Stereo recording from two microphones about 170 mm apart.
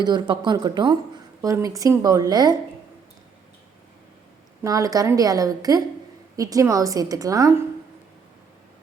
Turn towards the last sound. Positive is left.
turn(degrees=-20)  # may be behind; listen again after turning